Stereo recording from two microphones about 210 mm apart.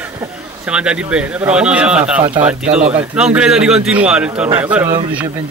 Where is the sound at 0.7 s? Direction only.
5° right (ahead or behind).